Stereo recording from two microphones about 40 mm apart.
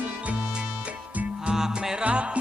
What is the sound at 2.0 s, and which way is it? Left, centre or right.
Music, right.